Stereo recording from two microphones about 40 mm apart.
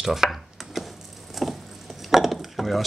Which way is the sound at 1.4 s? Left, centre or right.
Centre.